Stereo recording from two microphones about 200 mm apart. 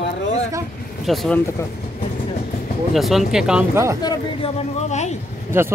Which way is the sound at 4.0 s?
25° left (ahead or behind).